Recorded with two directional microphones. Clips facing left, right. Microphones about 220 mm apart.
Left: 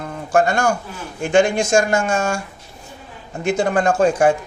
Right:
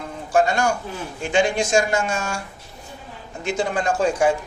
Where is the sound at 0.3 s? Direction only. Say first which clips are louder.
Left 2 dB; 50° left (ahead or behind).